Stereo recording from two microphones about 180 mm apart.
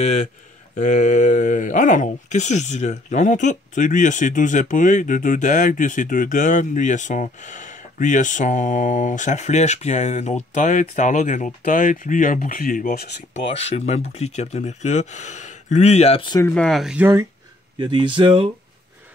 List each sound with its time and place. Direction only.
0.0 s speech: 40° left (ahead or behind); by 13.1 s 55° left (ahead or behind)
13.3 s speech: 35° left (ahead or behind)
16.3 s speech: 15° left (ahead or behind)
16.6 s speech: centre (ahead or behind)
17.7 s speech: 25° right (ahead or behind)